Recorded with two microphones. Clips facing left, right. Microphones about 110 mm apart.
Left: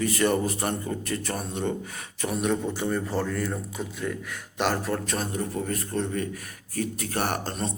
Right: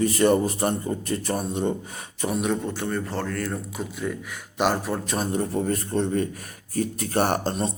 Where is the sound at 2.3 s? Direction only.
5° right (ahead or behind).